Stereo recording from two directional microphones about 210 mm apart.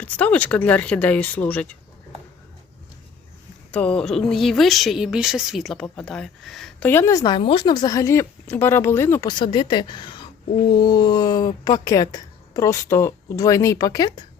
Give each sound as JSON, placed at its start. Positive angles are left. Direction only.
{"t": 0.0, "sound": "speech", "side_deg": 5}
{"t": 3.7, "sound": "speech", "side_deg": 5}
{"t": 9.3, "sound": "a woman's voice", "side_deg": 20}